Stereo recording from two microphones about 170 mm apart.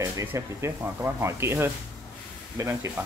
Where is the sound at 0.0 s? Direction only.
15° right (ahead or behind).